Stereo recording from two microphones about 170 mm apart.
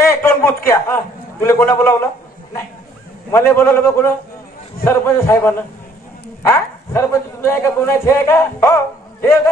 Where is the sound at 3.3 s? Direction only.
10° left (ahead or behind).